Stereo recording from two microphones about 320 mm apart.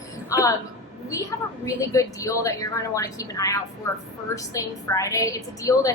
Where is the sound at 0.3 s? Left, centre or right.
Centre.